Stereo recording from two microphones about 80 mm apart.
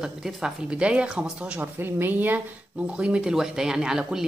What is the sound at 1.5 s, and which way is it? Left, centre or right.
Speech, right.